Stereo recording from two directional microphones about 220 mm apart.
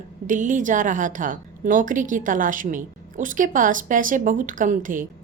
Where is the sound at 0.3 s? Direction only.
35° right (ahead or behind).